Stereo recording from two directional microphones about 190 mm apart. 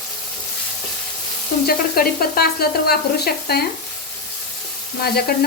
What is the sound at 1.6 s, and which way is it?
Frying, 50° left (ahead or behind).